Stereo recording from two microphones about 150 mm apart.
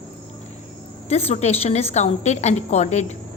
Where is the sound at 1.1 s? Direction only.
45° left (ahead or behind).